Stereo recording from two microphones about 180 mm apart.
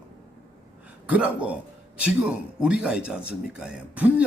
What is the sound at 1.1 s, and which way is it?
A man's voice, 10° right (ahead or behind).